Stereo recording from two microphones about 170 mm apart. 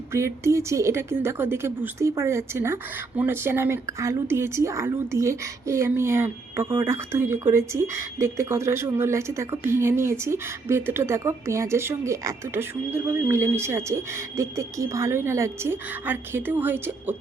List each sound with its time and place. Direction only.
0.1 s speech: 15° right (ahead or behind)